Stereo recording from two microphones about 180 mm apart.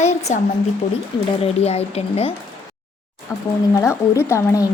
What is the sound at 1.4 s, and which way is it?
Speech, 35° left (ahead or behind).